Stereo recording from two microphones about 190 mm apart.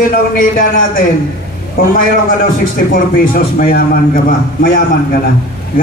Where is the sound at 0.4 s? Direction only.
45° left (ahead or behind).